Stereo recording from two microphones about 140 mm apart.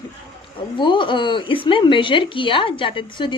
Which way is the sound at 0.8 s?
35° left (ahead or behind).